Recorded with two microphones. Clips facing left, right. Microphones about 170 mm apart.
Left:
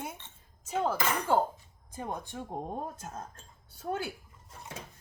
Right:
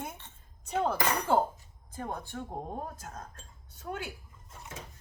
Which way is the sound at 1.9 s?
15° left (ahead or behind).